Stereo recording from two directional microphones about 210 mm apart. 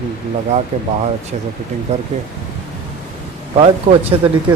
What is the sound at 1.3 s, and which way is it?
Speech, 35° right (ahead or behind).